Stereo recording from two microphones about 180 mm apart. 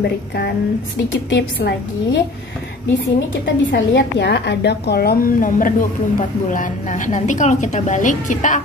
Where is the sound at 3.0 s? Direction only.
90° left.